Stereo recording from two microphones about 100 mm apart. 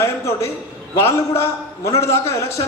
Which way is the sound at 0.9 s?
25° left (ahead or behind).